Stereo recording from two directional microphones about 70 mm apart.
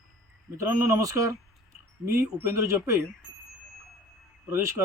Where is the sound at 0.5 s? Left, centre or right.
Right.